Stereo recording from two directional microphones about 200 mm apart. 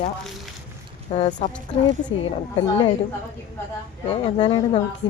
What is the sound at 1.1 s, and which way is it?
A woman's voice, 30° left (ahead or behind).